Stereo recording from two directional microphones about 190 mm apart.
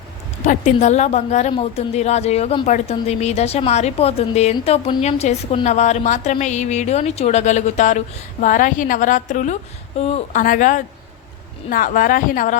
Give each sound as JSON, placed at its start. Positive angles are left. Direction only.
{"t": 0.4, "sound": "a woman's voice", "side_deg": 40}